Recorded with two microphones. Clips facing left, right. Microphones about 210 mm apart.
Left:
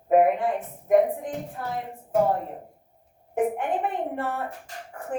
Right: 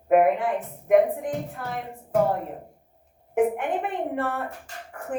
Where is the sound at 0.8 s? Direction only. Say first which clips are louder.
Right 1 dB; 65° right (ahead or behind).